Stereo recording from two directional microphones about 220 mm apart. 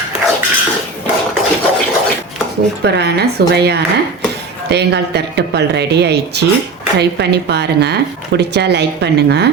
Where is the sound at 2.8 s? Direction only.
50° right (ahead or behind).